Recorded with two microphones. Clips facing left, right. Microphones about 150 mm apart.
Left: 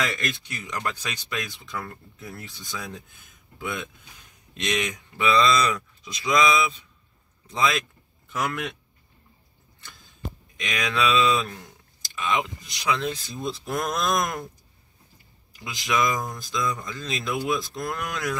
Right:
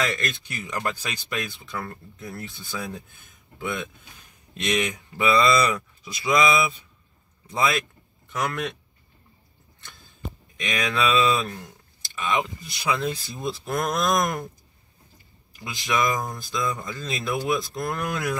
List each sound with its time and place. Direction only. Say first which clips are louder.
0.0 s speech: right 1 dB; centre (ahead or behind)
0.5 s speech: right 2 dB; 10° right (ahead or behind)
10.6 s speech: right 1 dB; centre (ahead or behind)
12.2 s speech: right 1 dB; centre (ahead or behind)
15.6 s speech: even; centre (ahead or behind)